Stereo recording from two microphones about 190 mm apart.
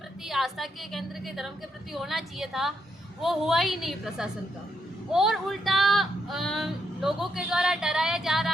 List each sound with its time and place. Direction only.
0.3 s speech: centre (ahead or behind)